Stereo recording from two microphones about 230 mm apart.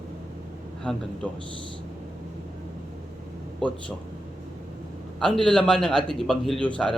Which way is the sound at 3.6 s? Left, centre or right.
Centre.